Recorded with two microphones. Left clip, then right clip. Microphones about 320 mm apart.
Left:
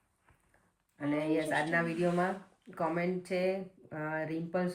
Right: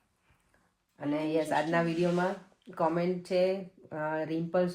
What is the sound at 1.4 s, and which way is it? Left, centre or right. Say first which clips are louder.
Speech: right 2 dB; centre.